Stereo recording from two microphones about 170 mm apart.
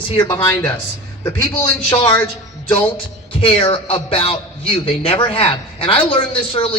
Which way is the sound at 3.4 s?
35° left (ahead or behind).